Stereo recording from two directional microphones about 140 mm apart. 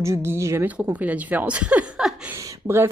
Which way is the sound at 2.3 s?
20° right (ahead or behind).